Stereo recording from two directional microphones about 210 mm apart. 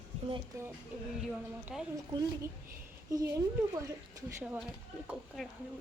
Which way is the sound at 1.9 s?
15° right (ahead or behind).